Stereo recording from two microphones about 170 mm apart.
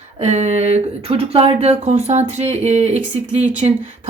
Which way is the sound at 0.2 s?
40° right (ahead or behind).